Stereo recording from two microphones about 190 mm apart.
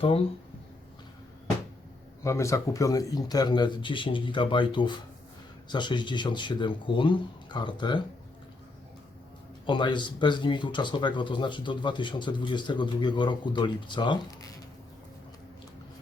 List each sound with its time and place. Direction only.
2.2 s speech: 15° left (ahead or behind)
9.6 s speech: 25° left (ahead or behind)